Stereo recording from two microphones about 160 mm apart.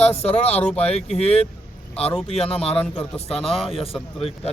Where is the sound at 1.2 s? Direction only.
40° left (ahead or behind).